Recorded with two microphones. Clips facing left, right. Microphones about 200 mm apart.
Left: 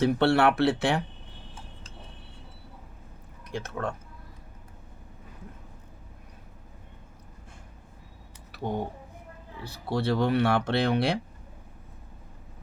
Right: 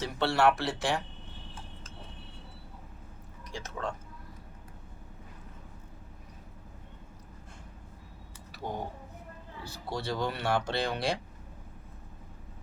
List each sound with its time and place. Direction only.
0.0 s speech: 60° left (ahead or behind)
3.5 s speech: 60° left (ahead or behind)
8.5 s a sound: 60° left (ahead or behind)
9.6 s speech: 60° left (ahead or behind)